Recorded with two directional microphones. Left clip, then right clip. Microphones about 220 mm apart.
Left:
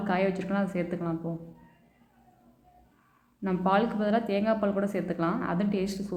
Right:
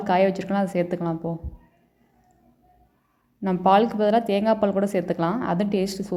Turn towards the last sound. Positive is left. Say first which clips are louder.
# right 6 dB
turn(degrees=-25)  # may be behind; listen again after turning